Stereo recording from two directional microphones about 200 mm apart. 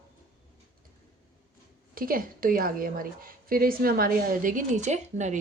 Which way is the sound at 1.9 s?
45° right (ahead or behind).